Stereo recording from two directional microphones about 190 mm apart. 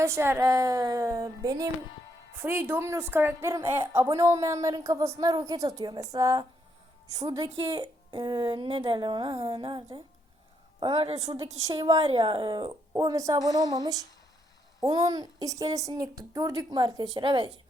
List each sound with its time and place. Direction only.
0.0 s a woman's voice: 15° right (ahead or behind)
13.4 s speech: 20° left (ahead or behind)
13.7 s a woman's voice: 20° right (ahead or behind)